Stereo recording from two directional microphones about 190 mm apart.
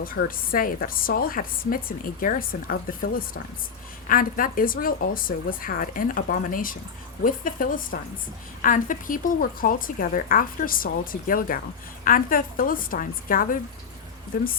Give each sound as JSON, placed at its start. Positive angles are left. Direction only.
{"t": 0.0, "sound": "speech", "side_deg": 50}